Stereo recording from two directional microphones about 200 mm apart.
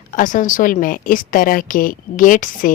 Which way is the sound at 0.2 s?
40° left (ahead or behind).